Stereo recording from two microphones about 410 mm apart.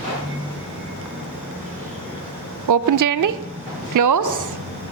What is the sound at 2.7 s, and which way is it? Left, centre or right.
A woman's voice, right.